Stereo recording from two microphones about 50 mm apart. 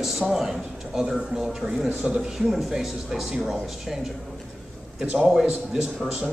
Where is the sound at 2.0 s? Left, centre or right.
Centre.